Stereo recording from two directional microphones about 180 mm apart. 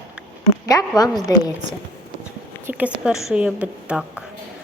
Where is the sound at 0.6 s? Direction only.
20° left (ahead or behind).